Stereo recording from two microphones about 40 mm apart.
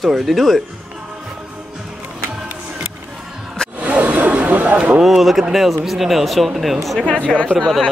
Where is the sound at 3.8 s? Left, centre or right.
Right.